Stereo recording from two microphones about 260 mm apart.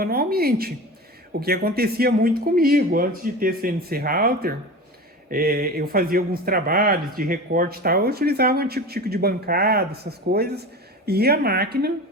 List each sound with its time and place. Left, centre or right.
0.0 s speech: right